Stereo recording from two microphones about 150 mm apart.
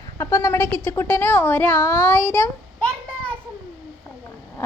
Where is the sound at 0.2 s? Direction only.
20° left (ahead or behind).